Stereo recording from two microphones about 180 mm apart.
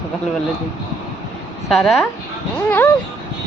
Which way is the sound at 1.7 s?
Centre (ahead or behind).